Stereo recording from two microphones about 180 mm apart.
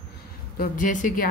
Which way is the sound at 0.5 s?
50° left (ahead or behind).